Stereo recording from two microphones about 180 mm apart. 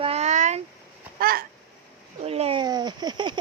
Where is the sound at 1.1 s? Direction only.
55° right (ahead or behind).